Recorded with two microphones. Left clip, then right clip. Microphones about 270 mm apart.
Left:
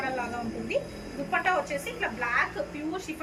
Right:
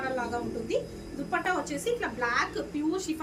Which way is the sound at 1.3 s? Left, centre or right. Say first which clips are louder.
Left 3 dB; centre.